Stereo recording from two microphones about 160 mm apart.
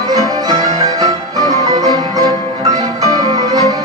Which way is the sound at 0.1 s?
20° right (ahead or behind).